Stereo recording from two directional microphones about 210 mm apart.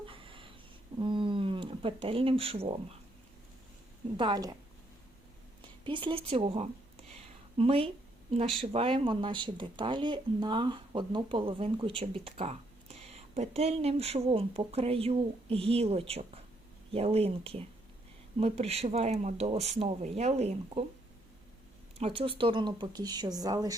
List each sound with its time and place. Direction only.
0.1 s a sound: 25° right (ahead or behind)
4.2 s speech: 20° right (ahead or behind)
5.6 s speech: 25° right (ahead or behind)
7.1 s a sound: 30° right (ahead or behind)
8.3 s speech: 30° right (ahead or behind)
21.9 s speech: 25° right (ahead or behind)